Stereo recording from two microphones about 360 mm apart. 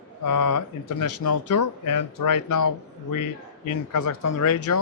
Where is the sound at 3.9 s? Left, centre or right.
Left.